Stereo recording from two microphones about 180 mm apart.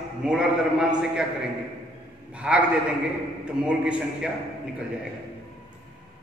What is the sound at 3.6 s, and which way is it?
Speech, 5° right (ahead or behind).